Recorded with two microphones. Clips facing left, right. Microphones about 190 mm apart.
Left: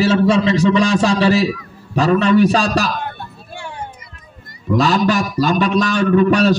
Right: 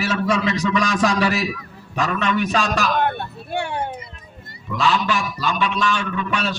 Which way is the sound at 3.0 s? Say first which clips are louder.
Right 6 dB; 65° right (ahead or behind).